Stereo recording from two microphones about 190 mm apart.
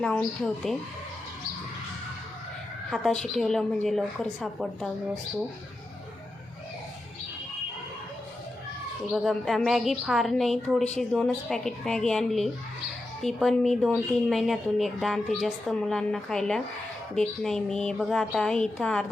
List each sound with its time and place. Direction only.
0.0 s a woman's voice: 5° left (ahead or behind)
2.9 s a woman's voice: 5° left (ahead or behind)
9.1 s a woman's voice: centre (ahead or behind)